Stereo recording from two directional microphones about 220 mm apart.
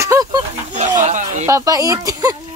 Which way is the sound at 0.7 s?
35° right (ahead or behind).